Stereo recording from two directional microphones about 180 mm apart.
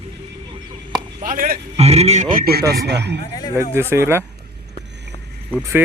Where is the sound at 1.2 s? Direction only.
50° right (ahead or behind).